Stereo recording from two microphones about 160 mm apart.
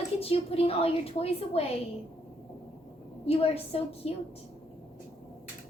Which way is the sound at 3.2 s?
40° left (ahead or behind).